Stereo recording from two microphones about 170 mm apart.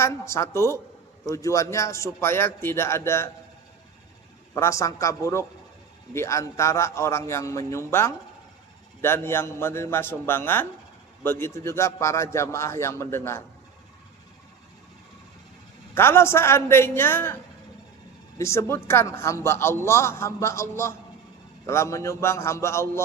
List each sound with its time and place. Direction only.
0.0 s a man's voice: 15° left (ahead or behind)
4.5 s a man's voice: 20° left (ahead or behind)
16.0 s a man's voice: 15° left (ahead or behind)
18.3 s a man's voice: 15° left (ahead or behind)